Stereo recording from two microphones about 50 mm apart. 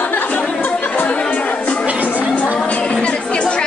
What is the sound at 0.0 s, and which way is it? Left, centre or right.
Chatter, left.